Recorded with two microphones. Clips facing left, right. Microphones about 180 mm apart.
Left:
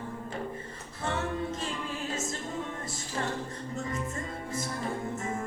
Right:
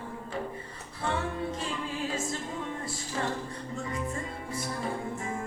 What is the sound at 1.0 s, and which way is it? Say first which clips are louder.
Music: even; 45° left (ahead or behind).